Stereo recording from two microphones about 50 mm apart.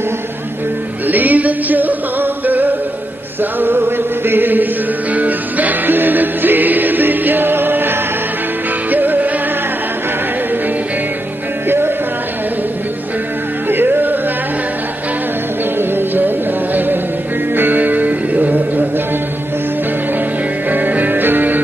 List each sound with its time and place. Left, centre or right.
1.0 s music: right
3.5 s chant: right
5.1 s music: right
11.6 s music: right
13.7 s music: right
15.8 s music: right
20.7 s music: right